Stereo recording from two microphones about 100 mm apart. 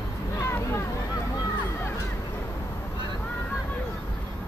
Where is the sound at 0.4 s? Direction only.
25° left (ahead or behind).